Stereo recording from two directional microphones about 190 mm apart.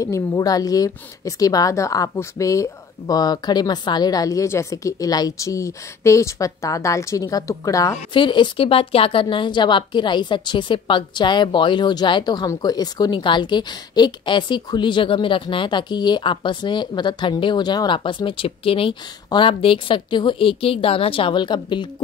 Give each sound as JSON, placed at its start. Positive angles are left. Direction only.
{"t": 0.0, "sound": "a woman's voice", "side_deg": 15}